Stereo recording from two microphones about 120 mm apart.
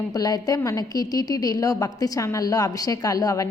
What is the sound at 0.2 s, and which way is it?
A woman's voice, 30° left (ahead or behind).